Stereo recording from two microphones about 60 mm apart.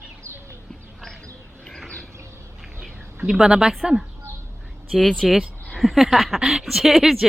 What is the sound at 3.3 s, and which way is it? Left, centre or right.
Speech, centre.